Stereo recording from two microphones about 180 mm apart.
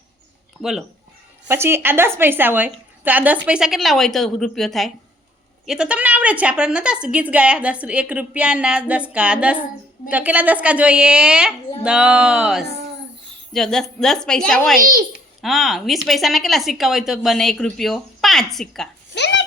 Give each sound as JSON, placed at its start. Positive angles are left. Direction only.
{"t": 0.6, "sound": "a woman's voice", "side_deg": 0}
{"t": 1.5, "sound": "a woman's voice", "side_deg": -15}
{"t": 14.8, "sound": "a child's voice", "side_deg": -50}
{"t": 15.4, "sound": "a woman's voice", "side_deg": 0}
{"t": 19.1, "sound": "chopping", "side_deg": 75}